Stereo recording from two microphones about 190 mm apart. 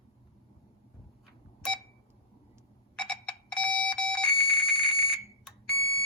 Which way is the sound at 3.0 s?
5° left (ahead or behind).